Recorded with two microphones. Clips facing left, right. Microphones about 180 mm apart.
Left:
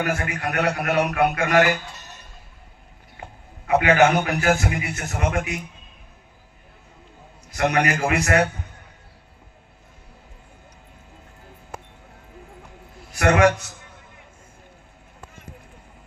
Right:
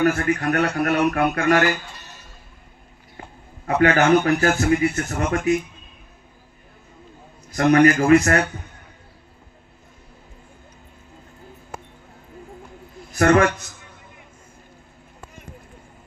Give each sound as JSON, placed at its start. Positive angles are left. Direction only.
{"t": 0.0, "sound": "a man's voice", "side_deg": -45}
{"t": 3.7, "sound": "a man's voice", "side_deg": -45}
{"t": 7.5, "sound": "a man's voice", "side_deg": -45}
{"t": 13.1, "sound": "a man's voice", "side_deg": -45}